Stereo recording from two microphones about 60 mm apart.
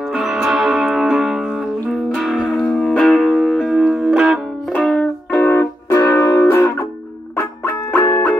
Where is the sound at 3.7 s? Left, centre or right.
Centre.